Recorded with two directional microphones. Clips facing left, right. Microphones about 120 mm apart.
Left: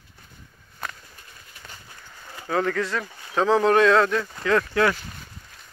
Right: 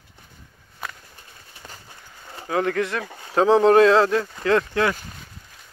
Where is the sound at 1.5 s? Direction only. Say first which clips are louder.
Right 3 dB; 35° right (ahead or behind).